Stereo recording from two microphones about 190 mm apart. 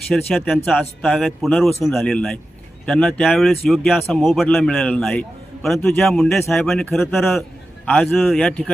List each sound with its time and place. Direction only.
0.1 s speech: centre (ahead or behind)